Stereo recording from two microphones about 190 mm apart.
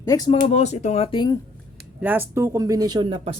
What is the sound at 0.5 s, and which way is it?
Speech, 35° left (ahead or behind).